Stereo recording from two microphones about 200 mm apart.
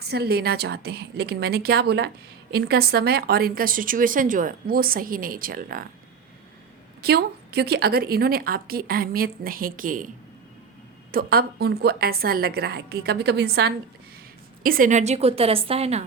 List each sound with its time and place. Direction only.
0.0 s a woman's voice: 55° right (ahead or behind)
7.0 s a woman's voice: 50° right (ahead or behind)
11.1 s a woman's voice: 50° right (ahead or behind); by 16.0 s 30° right (ahead or behind)